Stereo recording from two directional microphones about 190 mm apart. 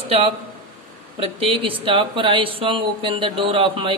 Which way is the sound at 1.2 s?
30° right (ahead or behind).